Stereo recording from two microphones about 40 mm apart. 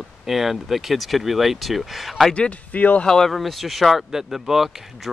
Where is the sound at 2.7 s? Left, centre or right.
Left.